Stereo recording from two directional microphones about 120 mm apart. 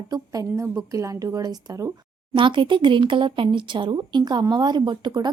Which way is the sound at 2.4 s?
45° right (ahead or behind).